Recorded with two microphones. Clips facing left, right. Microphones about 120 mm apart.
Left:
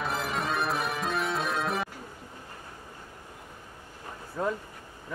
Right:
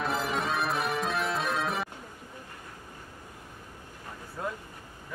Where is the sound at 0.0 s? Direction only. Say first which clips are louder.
Right 1 dB; centre (ahead or behind).